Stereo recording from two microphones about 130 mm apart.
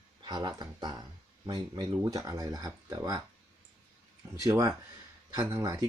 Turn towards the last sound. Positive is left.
turn(degrees=-20)  # may be behind; listen again after turning